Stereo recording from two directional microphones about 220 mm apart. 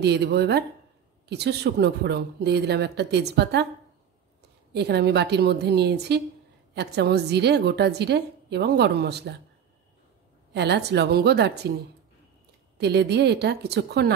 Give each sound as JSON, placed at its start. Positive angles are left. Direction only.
{"t": 0.0, "sound": "a woman's voice", "side_deg": -50}
{"t": 4.7, "sound": "a woman's voice", "side_deg": -50}
{"t": 10.5, "sound": "a woman's voice", "side_deg": -50}
{"t": 12.7, "sound": "a woman's voice", "side_deg": -50}